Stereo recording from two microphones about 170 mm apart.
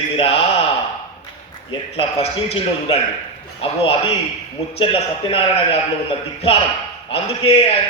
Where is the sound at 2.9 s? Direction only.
35° left (ahead or behind).